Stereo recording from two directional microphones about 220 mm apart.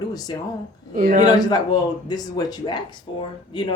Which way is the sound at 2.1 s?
15° left (ahead or behind).